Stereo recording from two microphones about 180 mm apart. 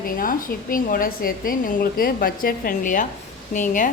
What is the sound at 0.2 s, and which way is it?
A woman's voice, 50° left (ahead or behind).